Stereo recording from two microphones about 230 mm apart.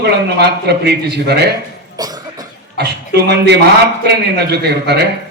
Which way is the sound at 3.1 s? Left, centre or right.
Right.